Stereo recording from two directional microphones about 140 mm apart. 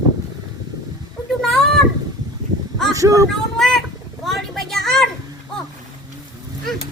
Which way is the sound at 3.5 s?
Centre (ahead or behind).